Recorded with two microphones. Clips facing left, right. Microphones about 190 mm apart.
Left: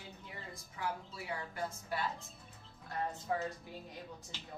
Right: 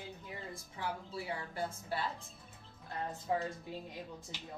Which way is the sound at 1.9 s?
30° right (ahead or behind).